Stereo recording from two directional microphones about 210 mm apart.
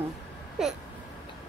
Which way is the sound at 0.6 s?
5° right (ahead or behind).